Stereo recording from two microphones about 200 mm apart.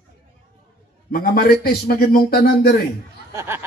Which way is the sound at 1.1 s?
45° left (ahead or behind).